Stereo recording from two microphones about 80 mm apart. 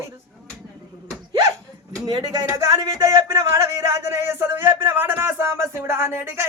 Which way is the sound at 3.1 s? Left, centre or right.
Right.